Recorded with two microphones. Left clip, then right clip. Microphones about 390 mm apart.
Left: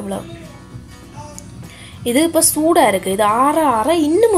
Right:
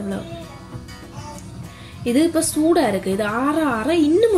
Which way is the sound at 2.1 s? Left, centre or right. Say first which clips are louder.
Left 3 dB; centre.